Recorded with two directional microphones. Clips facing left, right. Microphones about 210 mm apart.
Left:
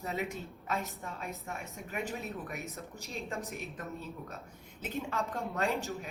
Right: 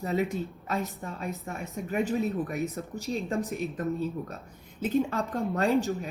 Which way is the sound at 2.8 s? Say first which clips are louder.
Right 10 dB; 40° right (ahead or behind).